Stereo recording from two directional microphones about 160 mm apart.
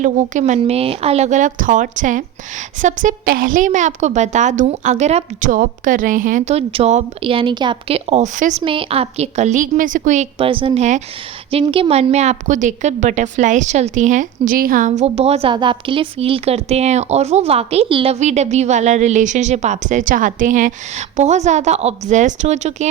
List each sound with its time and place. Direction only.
0.0 s a woman's voice: 50° right (ahead or behind)
0.6 s a woman's voice: 40° right (ahead or behind)
8.6 s a woman's voice: 35° right (ahead or behind); by 10.2 s 50° right (ahead or behind)
10.3 s a woman's voice: 35° right (ahead or behind)